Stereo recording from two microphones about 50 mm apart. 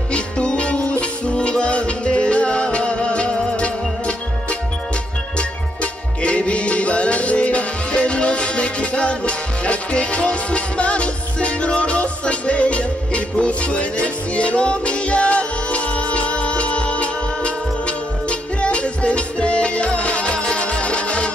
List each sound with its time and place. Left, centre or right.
0.1 s music: left
5.8 s music: left